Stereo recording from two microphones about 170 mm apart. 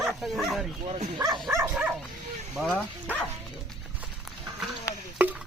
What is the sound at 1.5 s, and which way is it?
Speech, 15° right (ahead or behind).